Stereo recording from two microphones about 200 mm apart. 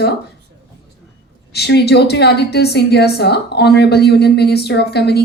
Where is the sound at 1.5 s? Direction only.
55° left (ahead or behind).